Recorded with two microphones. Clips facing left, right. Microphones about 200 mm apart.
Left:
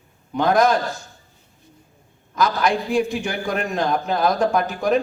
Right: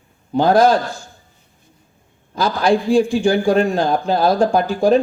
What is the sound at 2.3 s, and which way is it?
Speech, 30° right (ahead or behind).